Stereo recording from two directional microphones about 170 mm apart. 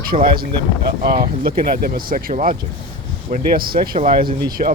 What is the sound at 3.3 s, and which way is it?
Speech, 60° right (ahead or behind).